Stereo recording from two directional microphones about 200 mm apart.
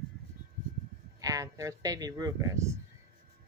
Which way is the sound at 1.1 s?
15° right (ahead or behind).